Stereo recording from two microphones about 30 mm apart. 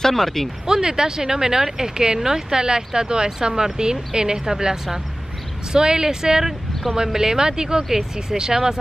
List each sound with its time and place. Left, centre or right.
0.1 s speech: centre
0.7 s speech: right